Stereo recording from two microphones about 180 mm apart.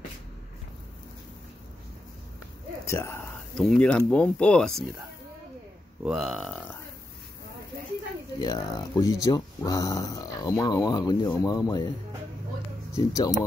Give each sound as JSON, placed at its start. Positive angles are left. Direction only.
{"t": 2.8, "sound": "a sound", "side_deg": 15}
{"t": 3.6, "sound": "speech", "side_deg": 5}
{"t": 6.0, "sound": "speech", "side_deg": 0}
{"t": 8.4, "sound": "speech", "side_deg": 25}
{"t": 12.9, "sound": "speech", "side_deg": 20}